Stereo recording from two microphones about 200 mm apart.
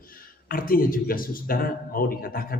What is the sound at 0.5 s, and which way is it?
A man's voice, 45° left (ahead or behind).